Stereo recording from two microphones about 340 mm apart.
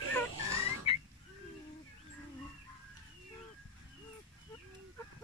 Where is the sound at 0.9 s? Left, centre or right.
Centre.